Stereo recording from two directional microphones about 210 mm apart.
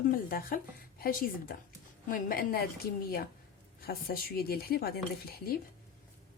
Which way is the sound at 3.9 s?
45° left (ahead or behind).